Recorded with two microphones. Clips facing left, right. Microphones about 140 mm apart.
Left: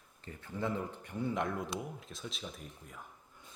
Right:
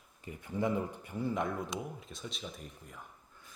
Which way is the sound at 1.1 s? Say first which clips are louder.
Right 1 dB; centre (ahead or behind).